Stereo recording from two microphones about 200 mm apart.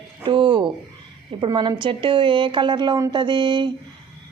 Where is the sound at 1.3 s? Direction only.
25° right (ahead or behind).